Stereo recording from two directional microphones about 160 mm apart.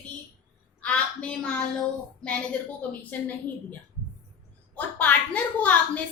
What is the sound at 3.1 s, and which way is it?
A woman's voice, 10° left (ahead or behind).